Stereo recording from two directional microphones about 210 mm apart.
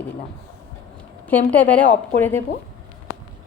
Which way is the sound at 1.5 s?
5° left (ahead or behind).